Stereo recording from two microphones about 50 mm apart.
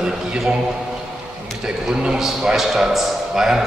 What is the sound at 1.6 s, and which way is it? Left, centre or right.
A man's voice, centre.